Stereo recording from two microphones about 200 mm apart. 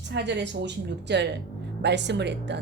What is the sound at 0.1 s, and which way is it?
Speech, 60° right (ahead or behind).